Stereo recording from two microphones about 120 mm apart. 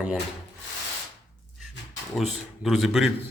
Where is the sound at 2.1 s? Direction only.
Centre (ahead or behind).